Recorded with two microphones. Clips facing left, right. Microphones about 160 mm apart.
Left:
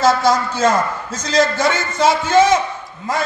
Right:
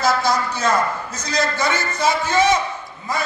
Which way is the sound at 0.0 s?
90° left.